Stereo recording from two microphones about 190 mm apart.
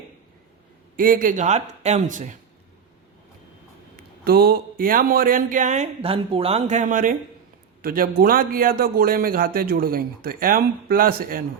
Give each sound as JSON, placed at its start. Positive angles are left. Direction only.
{"t": 0.9, "sound": "a man's voice", "side_deg": -45}
{"t": 3.9, "sound": "a man's voice", "side_deg": -50}